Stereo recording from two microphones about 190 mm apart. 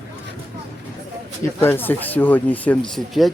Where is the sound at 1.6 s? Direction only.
10° left (ahead or behind).